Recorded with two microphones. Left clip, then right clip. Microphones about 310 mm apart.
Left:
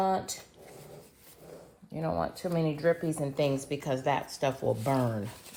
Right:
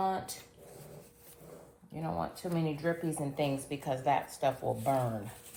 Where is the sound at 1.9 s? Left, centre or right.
Left.